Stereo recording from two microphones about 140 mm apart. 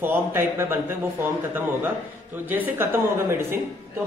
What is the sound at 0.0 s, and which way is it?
Speech, 15° right (ahead or behind).